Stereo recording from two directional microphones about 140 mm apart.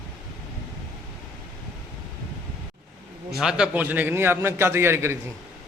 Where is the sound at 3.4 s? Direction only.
5° right (ahead or behind).